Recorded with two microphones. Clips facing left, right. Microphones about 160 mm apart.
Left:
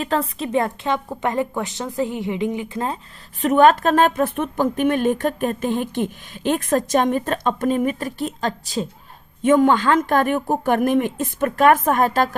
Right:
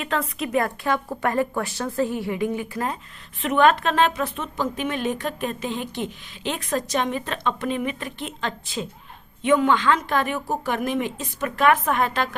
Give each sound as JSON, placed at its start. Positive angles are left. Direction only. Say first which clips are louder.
{"t": 0.0, "sound": "a woman's voice", "louder": "left 4 dB", "side_deg": 30}
{"t": 3.4, "sound": "a woman's voice", "louder": "left 4 dB", "side_deg": 40}